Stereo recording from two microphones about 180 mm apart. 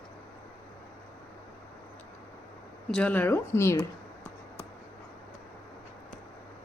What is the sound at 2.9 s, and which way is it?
Speech, 5° left (ahead or behind).